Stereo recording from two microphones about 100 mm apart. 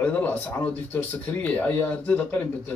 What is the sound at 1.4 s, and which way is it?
Speech, 15° left (ahead or behind).